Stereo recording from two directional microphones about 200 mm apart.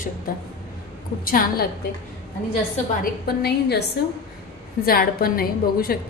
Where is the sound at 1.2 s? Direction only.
45° left (ahead or behind).